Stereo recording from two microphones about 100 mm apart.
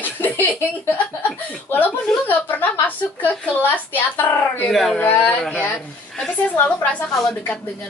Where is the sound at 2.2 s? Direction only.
15° left (ahead or behind).